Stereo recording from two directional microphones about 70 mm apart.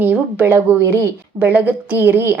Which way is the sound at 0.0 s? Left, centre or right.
Centre.